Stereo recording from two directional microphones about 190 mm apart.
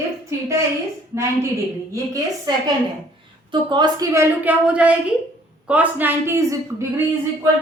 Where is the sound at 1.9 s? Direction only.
20° right (ahead or behind).